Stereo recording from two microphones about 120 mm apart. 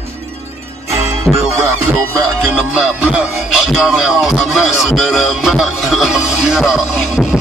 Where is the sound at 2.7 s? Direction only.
5° right (ahead or behind).